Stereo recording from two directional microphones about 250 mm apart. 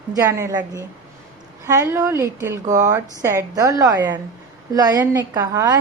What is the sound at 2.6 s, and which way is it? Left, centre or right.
Speech, right.